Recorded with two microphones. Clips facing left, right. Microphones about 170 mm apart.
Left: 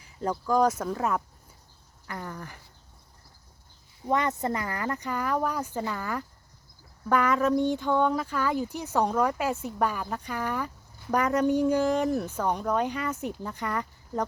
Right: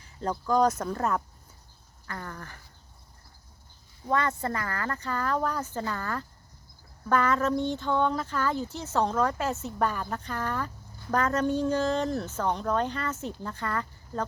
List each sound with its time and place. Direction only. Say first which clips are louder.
0.0 s speech: left 1 dB; 10° left (ahead or behind)
2.0 s speech: left 2 dB; 15° left (ahead or behind)
4.0 s speech: left 1 dB; 20° left (ahead or behind)